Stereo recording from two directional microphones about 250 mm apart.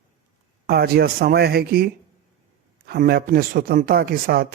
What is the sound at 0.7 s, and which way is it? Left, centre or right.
A man's voice, right.